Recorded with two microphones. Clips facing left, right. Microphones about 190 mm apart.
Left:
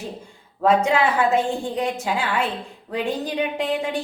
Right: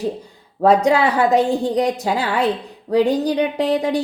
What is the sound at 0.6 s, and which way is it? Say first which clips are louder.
A woman's voice: right 4 dB; 35° right (ahead or behind).